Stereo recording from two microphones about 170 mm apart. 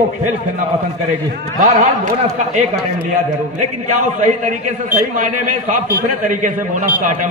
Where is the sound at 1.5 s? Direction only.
50° right (ahead or behind).